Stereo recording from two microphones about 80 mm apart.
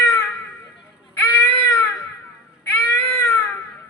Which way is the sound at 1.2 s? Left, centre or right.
Left.